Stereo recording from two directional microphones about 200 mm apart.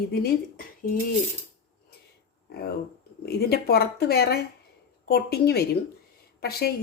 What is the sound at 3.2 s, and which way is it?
A woman's voice, 50° left (ahead or behind).